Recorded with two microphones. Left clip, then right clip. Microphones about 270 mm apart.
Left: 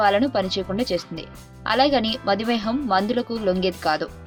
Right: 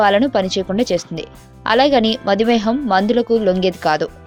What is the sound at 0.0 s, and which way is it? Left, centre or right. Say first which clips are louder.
A woman's voice: right 5 dB; right.